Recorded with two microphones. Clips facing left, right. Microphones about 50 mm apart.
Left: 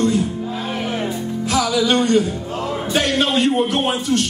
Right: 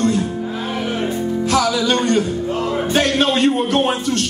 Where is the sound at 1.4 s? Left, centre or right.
Right.